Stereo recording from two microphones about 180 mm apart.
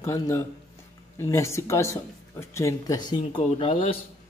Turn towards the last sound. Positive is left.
turn(degrees=30)  # may be behind; listen again after turning